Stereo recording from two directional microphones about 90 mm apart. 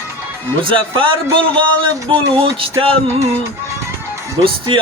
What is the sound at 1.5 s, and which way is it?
Speech, 65° right (ahead or behind).